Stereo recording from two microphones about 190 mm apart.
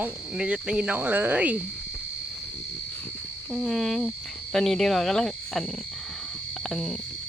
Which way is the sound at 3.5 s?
Centre (ahead or behind).